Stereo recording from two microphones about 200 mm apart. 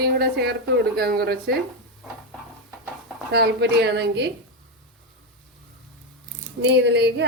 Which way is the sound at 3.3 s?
55° right (ahead or behind).